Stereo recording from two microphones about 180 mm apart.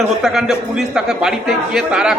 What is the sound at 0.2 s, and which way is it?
A man's voice, centre (ahead or behind).